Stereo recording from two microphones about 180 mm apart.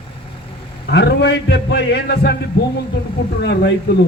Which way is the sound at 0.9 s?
70° left (ahead or behind).